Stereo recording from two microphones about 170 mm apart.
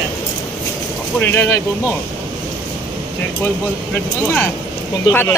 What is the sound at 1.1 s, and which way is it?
Speech, 10° left (ahead or behind).